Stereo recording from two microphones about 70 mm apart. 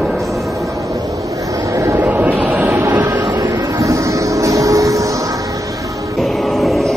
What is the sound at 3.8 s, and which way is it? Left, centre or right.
Vehicle, right.